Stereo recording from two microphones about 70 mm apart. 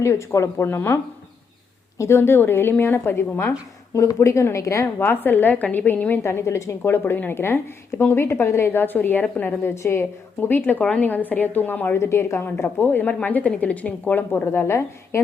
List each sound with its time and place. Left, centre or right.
0.0 s a woman's voice: left
2.0 s a woman's voice: left
3.9 s a woman's voice: left
4.9 s a woman's voice: left
6.2 s a woman's voice: left
11.9 s a woman's voice: left
12.6 s a woman's voice: left